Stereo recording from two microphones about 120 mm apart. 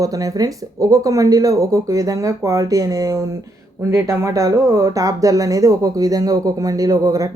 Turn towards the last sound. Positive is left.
turn(degrees=-30)  # may be behind; listen again after turning